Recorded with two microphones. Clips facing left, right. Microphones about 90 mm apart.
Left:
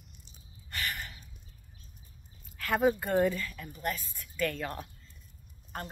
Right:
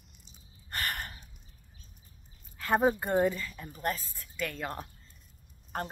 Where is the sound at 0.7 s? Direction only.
50° right (ahead or behind).